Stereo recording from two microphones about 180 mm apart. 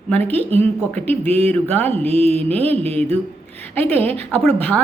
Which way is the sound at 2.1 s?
35° right (ahead or behind).